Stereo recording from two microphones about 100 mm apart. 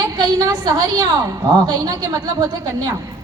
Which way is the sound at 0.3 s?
40° right (ahead or behind).